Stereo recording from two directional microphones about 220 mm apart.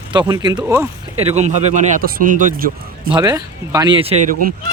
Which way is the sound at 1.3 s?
30° right (ahead or behind).